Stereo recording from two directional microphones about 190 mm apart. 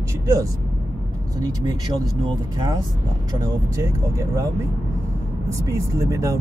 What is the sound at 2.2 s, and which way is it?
Speech, 25° right (ahead or behind).